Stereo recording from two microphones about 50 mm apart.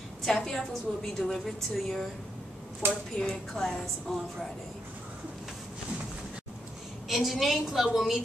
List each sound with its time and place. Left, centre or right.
0.2 s a woman's voice: centre
2.8 s a woman's voice: right
3.2 s a woman's voice: centre
7.1 s a woman's voice: centre